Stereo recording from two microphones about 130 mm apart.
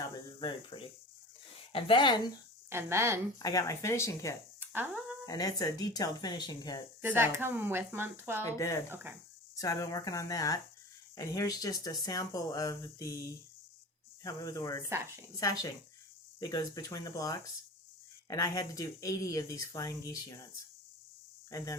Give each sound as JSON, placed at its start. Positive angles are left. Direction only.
{"t": 0.3, "sound": "speech", "side_deg": 40}
{"t": 2.6, "sound": "speech", "side_deg": -20}
{"t": 3.3, "sound": "speech", "side_deg": 25}
{"t": 4.6, "sound": "a sound", "side_deg": -15}
{"t": 5.2, "sound": "speech", "side_deg": 30}
{"t": 7.0, "sound": "speech", "side_deg": -15}
{"t": 8.4, "sound": "speech", "side_deg": 25}
{"t": 14.8, "sound": "speech", "side_deg": -20}
{"t": 15.4, "sound": "speech", "side_deg": 25}
{"t": 21.5, "sound": "speech", "side_deg": 25}